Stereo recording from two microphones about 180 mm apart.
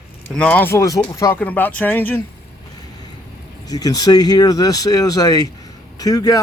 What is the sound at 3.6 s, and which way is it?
A man's voice, 20° left (ahead or behind).